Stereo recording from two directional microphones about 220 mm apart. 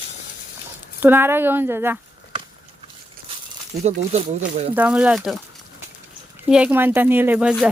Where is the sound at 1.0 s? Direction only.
10° right (ahead or behind).